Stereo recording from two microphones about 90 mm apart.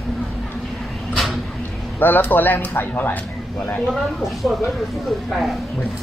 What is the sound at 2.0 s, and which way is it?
Speech, 20° left (ahead or behind).